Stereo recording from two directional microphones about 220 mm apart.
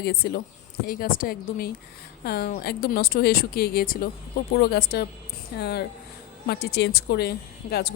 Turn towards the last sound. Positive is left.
turn(degrees=45)  # may be behind; listen again after turning